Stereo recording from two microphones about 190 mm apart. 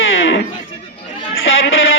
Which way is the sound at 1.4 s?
90° left.